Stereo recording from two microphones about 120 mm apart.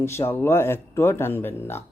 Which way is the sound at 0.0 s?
20° left (ahead or behind).